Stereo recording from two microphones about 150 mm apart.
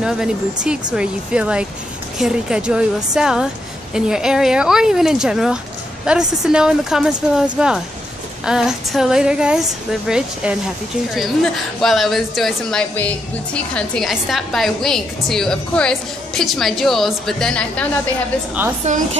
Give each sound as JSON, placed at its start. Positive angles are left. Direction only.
{"t": 0.0, "sound": "a woman's voice", "side_deg": -5}
{"t": 11.8, "sound": "a woman's voice", "side_deg": 0}
{"t": 18.8, "sound": "speech", "side_deg": -50}